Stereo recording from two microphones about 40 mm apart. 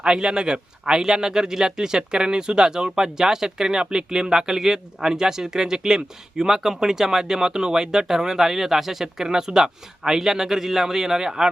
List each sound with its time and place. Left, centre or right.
0.0 s speech: right